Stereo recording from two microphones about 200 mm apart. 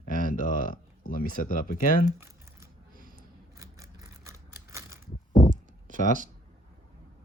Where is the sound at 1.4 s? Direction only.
40° left (ahead or behind).